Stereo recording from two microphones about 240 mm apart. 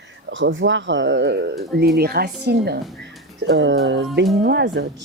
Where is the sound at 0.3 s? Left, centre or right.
Right.